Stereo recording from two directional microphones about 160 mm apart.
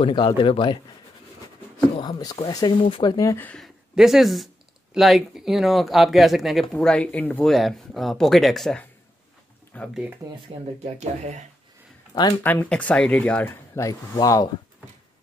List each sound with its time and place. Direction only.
0.0 s speech: 30° left (ahead or behind)
2.0 s speech: 25° left (ahead or behind); by 9.9 s 10° left (ahead or behind)
10.5 s speech: 35° right (ahead or behind)
11.0 s speech: 45° right (ahead or behind)
12.1 s speech: 25° left (ahead or behind)
12.4 s speech: 10° left (ahead or behind)